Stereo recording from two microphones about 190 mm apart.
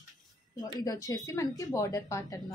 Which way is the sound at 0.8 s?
20° left (ahead or behind).